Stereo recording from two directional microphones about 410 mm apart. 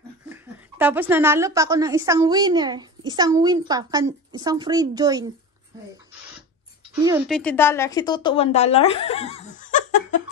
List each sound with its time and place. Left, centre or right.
0.3 s a woman's voice: centre
7.0 s speech: centre